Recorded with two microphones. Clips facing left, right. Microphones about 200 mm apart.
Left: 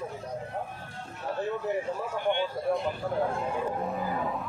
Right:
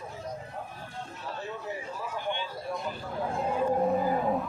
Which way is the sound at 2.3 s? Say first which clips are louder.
Left 7 dB; 60° left (ahead or behind).